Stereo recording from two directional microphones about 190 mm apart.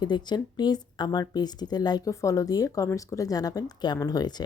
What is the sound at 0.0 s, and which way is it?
Speech, 25° left (ahead or behind).